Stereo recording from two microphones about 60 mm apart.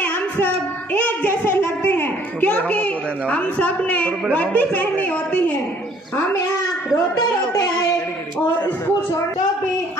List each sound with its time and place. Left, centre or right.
0.9 s a woman's voice: left